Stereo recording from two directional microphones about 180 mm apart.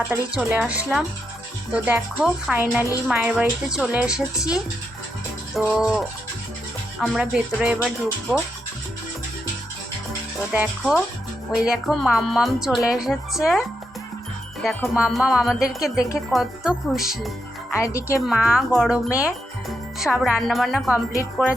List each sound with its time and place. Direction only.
0.1 s a woman's voice: 10° right (ahead or behind)
10.5 s a woman's voice: 5° right (ahead or behind)
14.6 s music: 10° left (ahead or behind)
14.9 s a woman's voice: 5° right (ahead or behind)
17.7 s speech: 15° left (ahead or behind)
18.3 s a woman's voice: 5° right (ahead or behind)